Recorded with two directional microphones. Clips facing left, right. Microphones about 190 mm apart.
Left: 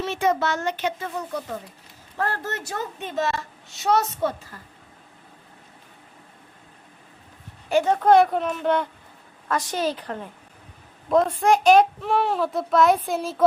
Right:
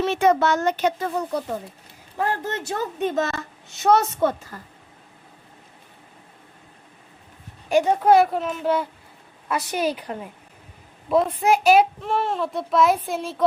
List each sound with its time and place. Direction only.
0.0 s a child's voice: 55° right (ahead or behind); by 1.7 s 30° right (ahead or behind)
2.1 s a woman's voice: 15° right (ahead or behind)
2.7 s a child's voice: 45° right (ahead or behind)
7.7 s a child's voice: 15° right (ahead or behind)